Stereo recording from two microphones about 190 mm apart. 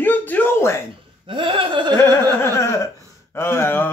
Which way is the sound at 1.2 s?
25° right (ahead or behind).